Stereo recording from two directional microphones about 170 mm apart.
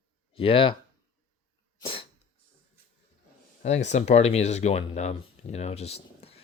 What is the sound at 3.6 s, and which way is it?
Speech, 45° left (ahead or behind).